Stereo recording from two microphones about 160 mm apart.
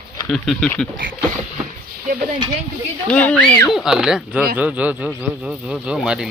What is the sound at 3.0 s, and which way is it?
A man's voice, 5° left (ahead or behind).